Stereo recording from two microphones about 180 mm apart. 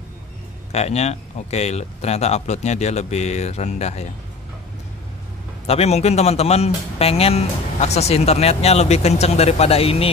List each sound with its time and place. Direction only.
0.7 s speech: 35° left (ahead or behind)
5.7 s speech: 35° left (ahead or behind)